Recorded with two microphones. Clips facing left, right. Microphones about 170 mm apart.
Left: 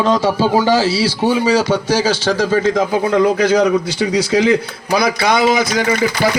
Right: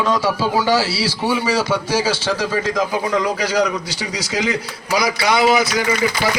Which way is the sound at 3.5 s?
55° left (ahead or behind).